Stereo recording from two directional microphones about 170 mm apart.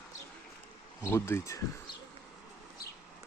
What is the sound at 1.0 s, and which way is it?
Speech, 15° left (ahead or behind).